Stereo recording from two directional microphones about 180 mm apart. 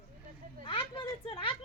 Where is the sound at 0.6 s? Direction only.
30° left (ahead or behind).